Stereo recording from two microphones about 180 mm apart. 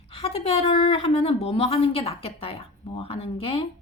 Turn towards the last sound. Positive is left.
turn(degrees=30)  # may be behind; listen again after turning